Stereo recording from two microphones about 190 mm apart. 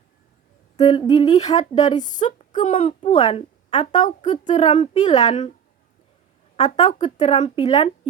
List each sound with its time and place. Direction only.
0.8 s humming: 20° left (ahead or behind)
1.4 s a woman's voice: 35° left (ahead or behind)
6.6 s a woman's voice: 40° left (ahead or behind)